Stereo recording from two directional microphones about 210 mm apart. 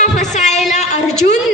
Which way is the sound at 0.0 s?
35° left (ahead or behind).